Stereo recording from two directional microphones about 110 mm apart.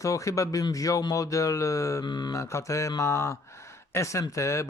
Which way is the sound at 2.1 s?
40° left (ahead or behind).